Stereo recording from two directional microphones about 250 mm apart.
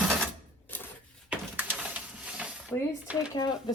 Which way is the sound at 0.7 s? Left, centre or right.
Centre.